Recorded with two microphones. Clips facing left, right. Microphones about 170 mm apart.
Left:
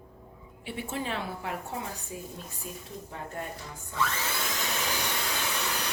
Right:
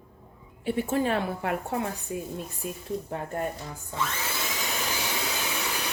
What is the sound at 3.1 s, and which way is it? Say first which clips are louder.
Speech: right 5 dB; 50° right (ahead or behind).